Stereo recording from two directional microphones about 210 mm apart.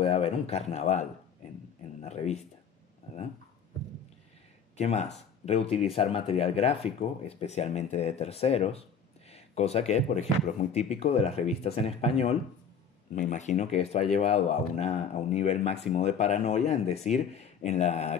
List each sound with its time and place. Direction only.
0.0 s a sound: 30° left (ahead or behind)
4.7 s speech: 30° left (ahead or behind)
13.1 s speech: 35° left (ahead or behind)